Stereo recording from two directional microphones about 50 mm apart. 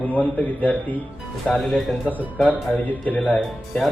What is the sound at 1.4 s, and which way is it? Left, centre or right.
Speech, centre.